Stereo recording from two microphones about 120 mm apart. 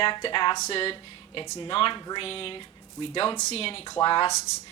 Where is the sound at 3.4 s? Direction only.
60° left (ahead or behind).